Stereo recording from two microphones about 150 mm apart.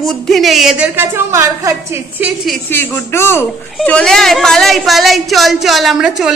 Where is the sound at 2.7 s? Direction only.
15° left (ahead or behind).